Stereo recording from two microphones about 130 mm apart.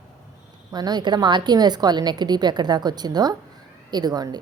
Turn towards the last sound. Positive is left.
turn(degrees=-30)  # may be behind; listen again after turning